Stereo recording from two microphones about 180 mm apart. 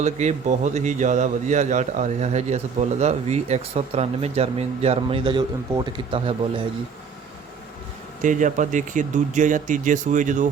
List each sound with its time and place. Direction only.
0.0 s a man's voice: 40° right (ahead or behind)
8.2 s speech: 45° right (ahead or behind)